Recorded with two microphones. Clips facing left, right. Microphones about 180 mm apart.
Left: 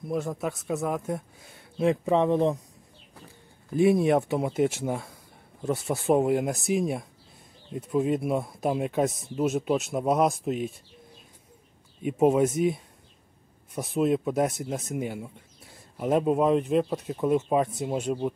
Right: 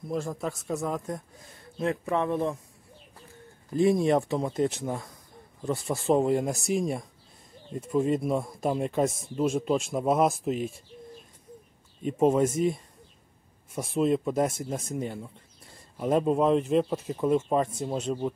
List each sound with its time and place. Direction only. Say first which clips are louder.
0.1 s speech: left 2 dB; centre (ahead or behind)
1.8 s speech: left 5 dB; 20° left (ahead or behind)
3.7 s speech: left 1 dB; 5° left (ahead or behind)
12.0 s speech: left 1 dB; 10° left (ahead or behind)